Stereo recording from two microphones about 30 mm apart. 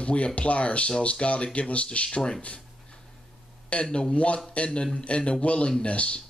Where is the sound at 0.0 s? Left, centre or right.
Left.